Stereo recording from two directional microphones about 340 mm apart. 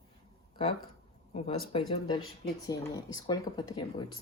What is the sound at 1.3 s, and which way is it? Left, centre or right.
Speech, centre.